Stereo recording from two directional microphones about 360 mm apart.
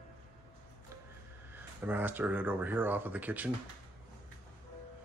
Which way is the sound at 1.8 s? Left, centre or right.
Centre.